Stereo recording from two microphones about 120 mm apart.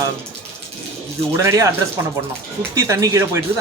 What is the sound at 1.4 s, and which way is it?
Speech, 25° right (ahead or behind).